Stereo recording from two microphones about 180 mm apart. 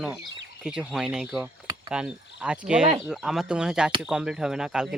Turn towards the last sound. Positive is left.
turn(degrees=-5)  # may be behind; listen again after turning